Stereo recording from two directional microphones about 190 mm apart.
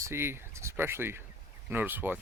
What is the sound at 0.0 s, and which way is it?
Speech, 15° right (ahead or behind).